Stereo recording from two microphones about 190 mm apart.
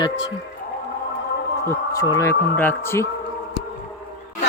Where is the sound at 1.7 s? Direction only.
20° left (ahead or behind).